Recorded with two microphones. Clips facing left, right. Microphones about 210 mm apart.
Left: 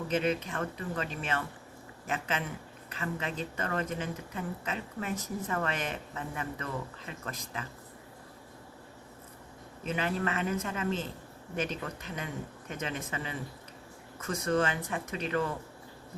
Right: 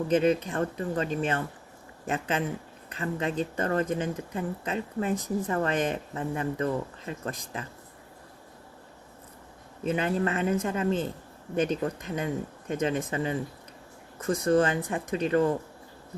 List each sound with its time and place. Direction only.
0.1 s speech: 35° right (ahead or behind)
9.8 s speech: 35° right (ahead or behind)